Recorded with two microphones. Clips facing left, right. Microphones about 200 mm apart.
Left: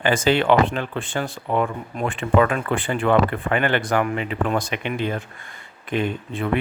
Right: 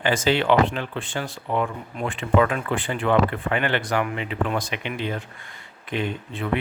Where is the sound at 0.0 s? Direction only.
50° left (ahead or behind).